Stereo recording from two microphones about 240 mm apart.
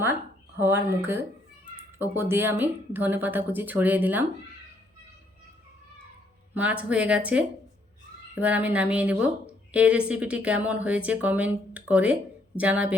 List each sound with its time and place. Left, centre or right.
0.6 s speech: centre
6.5 s a woman's voice: centre